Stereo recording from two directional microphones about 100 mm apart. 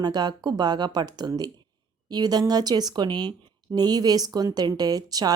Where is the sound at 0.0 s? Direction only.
45° right (ahead or behind).